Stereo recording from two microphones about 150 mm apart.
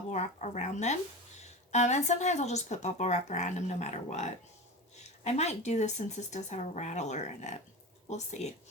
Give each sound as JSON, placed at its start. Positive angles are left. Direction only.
{"t": 0.1, "sound": "a woman's voice", "side_deg": 50}